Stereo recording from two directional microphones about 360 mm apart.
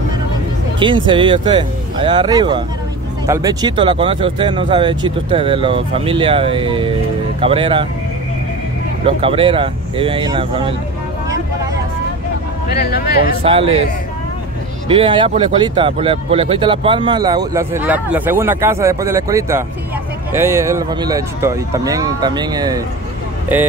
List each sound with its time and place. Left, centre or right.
0.7 s speech: centre
9.0 s speech: centre
12.8 s speech: left
13.4 s speech: centre
14.9 s speech: centre